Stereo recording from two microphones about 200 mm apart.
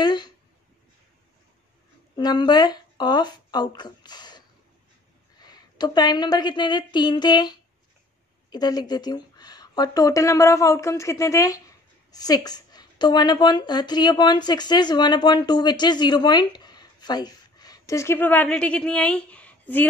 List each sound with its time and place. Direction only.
0.0 s a sound: 20° left (ahead or behind)
2.1 s speech: 20° left (ahead or behind)
5.4 s a woman's voice: 20° left (ahead or behind)